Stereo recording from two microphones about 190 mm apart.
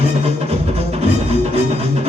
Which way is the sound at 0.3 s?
35° right (ahead or behind).